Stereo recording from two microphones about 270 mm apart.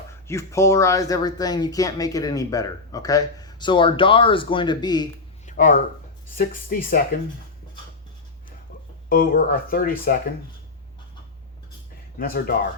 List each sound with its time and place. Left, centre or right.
0.3 s speech: centre
5.5 s speech: left
9.0 s speech: left
12.2 s speech: left